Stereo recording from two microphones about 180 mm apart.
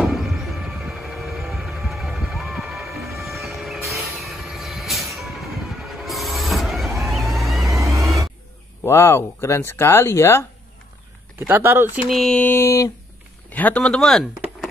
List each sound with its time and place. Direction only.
0.0 s a sound: centre (ahead or behind)
4.2 s vehicle: centre (ahead or behind)
7.7 s vehicle: 15° right (ahead or behind)
8.8 s speech: 15° left (ahead or behind)
11.3 s speech: 10° right (ahead or behind)
12.1 s speech: centre (ahead or behind)